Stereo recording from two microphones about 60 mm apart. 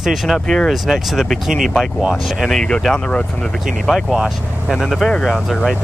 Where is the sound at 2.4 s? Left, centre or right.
Centre.